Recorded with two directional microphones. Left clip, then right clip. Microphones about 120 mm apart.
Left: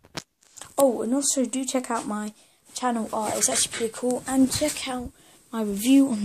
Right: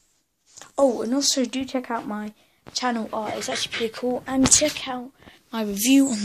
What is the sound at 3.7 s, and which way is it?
Speech, 10° left (ahead or behind).